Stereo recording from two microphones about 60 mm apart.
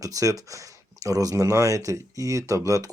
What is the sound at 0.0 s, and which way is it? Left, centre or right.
Speech, right.